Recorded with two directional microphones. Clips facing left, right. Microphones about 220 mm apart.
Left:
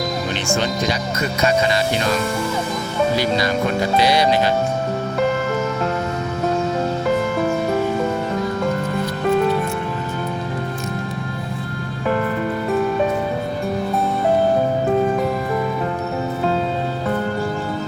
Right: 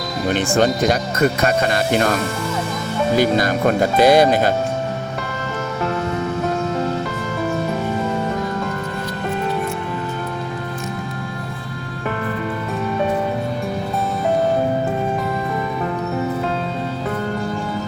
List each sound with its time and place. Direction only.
0.3 s speech: 55° right (ahead or behind)
3.2 s speech: 50° right (ahead or behind)